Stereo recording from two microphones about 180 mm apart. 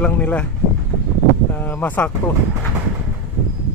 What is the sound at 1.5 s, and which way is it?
Speech, 10° left (ahead or behind).